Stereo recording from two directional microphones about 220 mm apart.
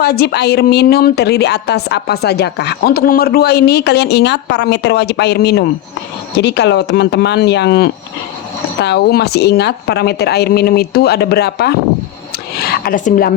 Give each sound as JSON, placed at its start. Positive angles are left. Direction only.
{"t": 0.0, "sound": "a woman's voice", "side_deg": 45}
{"t": 12.7, "sound": "a woman's voice", "side_deg": 40}